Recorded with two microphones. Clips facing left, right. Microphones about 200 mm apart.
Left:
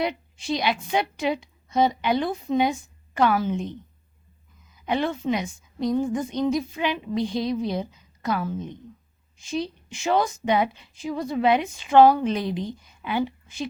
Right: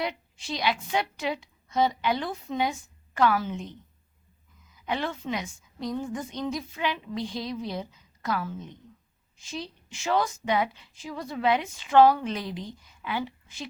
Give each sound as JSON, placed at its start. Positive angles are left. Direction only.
{"t": 0.0, "sound": "a woman's voice", "side_deg": 15}
{"t": 4.9, "sound": "a woman's voice", "side_deg": 20}